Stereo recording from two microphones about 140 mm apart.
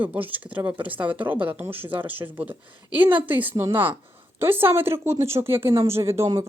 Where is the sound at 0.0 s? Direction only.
10° right (ahead or behind).